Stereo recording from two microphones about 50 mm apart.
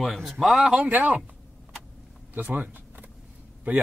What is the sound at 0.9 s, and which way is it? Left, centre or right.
Speech, right.